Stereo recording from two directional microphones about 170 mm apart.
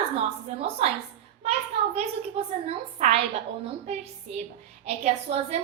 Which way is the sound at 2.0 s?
35° right (ahead or behind).